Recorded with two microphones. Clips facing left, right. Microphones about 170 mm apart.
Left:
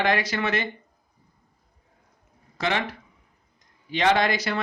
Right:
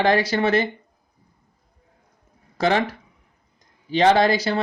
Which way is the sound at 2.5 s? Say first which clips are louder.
Right 6 dB; 35° right (ahead or behind).